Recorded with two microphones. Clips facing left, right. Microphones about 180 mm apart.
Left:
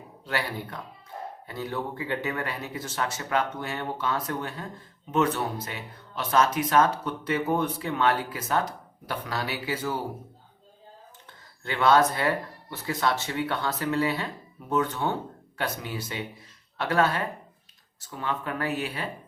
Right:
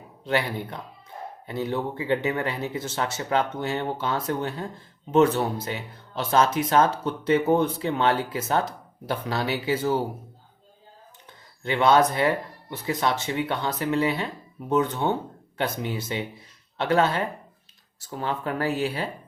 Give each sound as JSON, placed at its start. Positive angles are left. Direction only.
{"t": 0.3, "sound": "speech", "side_deg": -20}
{"t": 5.6, "sound": "speech", "side_deg": -30}
{"t": 11.6, "sound": "speech", "side_deg": -20}